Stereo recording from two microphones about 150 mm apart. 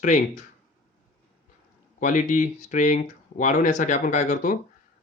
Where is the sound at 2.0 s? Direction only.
60° left (ahead or behind).